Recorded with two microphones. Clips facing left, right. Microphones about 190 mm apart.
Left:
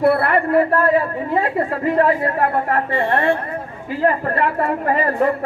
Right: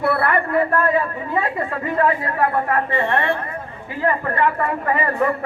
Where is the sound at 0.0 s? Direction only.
30° left (ahead or behind).